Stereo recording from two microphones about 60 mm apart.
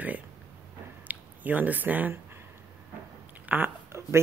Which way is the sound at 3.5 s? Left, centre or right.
Right.